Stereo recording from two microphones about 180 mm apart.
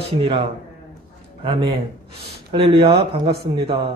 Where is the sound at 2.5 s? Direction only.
30° right (ahead or behind).